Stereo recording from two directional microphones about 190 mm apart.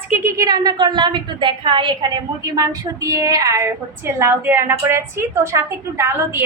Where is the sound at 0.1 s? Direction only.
15° right (ahead or behind).